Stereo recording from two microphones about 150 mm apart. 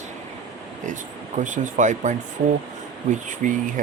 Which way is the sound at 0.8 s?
55° right (ahead or behind).